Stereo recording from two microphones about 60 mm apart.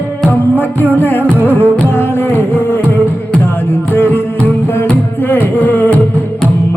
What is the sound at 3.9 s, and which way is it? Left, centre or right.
Music, left.